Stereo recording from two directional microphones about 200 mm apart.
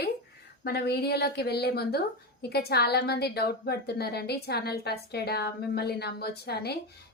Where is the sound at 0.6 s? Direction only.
55° left (ahead or behind).